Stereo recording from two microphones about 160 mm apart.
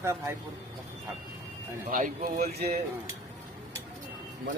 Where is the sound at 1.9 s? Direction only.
60° right (ahead or behind).